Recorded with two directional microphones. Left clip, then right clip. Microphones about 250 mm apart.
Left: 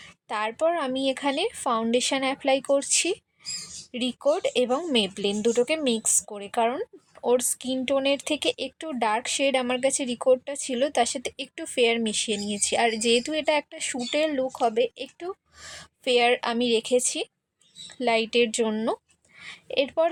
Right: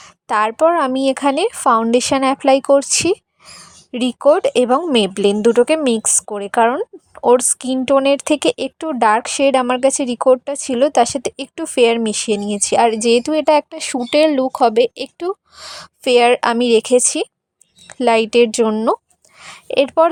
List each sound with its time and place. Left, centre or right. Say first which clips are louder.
0.0 s a woman's voice: right 12 dB; right